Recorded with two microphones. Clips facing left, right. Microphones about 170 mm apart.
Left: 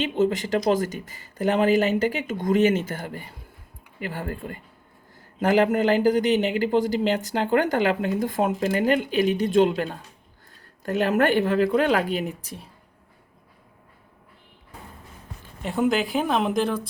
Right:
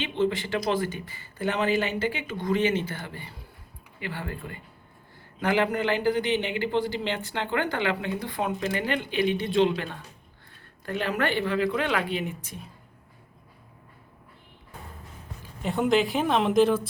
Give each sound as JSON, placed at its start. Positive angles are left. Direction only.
{"t": 0.0, "sound": "a man's voice", "side_deg": 40}
{"t": 15.6, "sound": "a woman's voice", "side_deg": 0}